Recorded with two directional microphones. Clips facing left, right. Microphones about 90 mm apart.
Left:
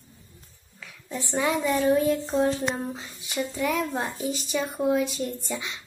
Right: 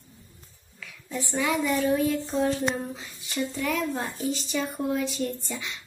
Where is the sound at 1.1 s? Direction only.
30° left (ahead or behind).